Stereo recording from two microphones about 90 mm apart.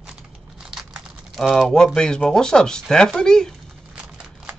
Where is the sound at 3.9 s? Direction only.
10° right (ahead or behind).